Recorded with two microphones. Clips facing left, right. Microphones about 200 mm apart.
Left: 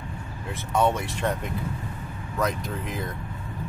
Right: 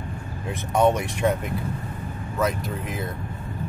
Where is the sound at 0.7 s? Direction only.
15° right (ahead or behind).